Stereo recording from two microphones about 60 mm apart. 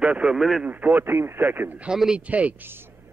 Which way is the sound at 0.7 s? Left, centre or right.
Right.